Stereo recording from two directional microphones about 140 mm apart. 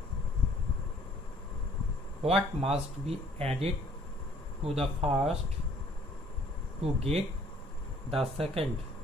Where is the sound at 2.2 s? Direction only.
45° right (ahead or behind).